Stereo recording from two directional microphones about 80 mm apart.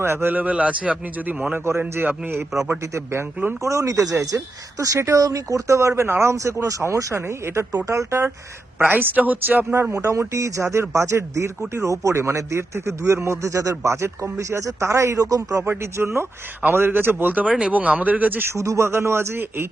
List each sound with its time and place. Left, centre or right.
0.0 s speech: right
3.6 s speech: right
8.8 s speech: right
9.9 s speech: right
15.6 s speech: right